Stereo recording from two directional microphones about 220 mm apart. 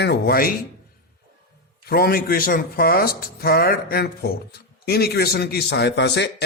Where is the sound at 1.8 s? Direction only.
45° left (ahead or behind).